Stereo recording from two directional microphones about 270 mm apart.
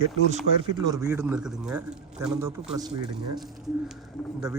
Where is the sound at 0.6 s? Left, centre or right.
Centre.